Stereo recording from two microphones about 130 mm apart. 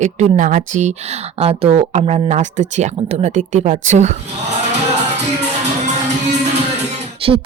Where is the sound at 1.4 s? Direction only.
50° right (ahead or behind); by 4.1 s 65° right (ahead or behind).